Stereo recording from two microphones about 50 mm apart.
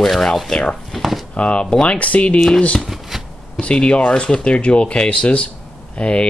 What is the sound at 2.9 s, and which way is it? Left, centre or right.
Shuffling cards, centre.